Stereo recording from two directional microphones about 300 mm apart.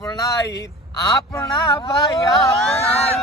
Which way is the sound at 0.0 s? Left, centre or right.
Centre.